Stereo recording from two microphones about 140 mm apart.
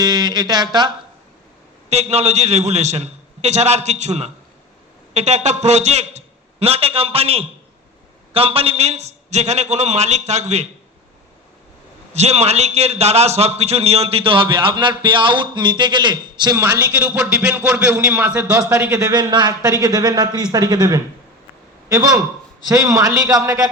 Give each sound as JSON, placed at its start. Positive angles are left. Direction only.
{"t": 0.0, "sound": "a man's voice", "side_deg": -30}
{"t": 1.9, "sound": "a man's voice", "side_deg": -50}
{"t": 12.1, "sound": "a man's voice", "side_deg": -50}
{"t": 16.6, "sound": "speech", "side_deg": -15}
{"t": 19.0, "sound": "a man's voice", "side_deg": -30}